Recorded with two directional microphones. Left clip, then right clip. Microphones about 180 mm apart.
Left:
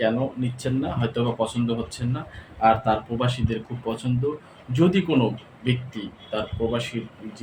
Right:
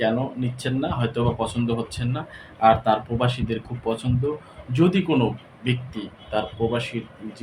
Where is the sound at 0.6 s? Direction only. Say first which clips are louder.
Right 1 dB; 15° right (ahead or behind).